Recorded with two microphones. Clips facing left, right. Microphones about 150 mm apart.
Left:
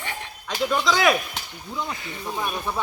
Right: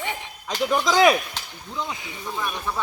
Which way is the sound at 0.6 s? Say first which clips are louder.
Right 3 dB; 20° right (ahead or behind).